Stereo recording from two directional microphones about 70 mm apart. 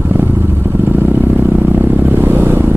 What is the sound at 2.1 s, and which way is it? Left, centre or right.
Vehicle, right.